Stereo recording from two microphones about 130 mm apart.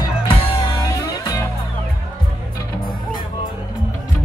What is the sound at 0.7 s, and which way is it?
Music, 25° left (ahead or behind).